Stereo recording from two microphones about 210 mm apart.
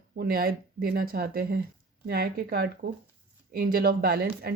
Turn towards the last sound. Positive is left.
turn(degrees=-45)  # may be behind; listen again after turning